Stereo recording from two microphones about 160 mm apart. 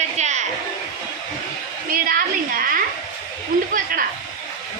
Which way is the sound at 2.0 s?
60° right (ahead or behind).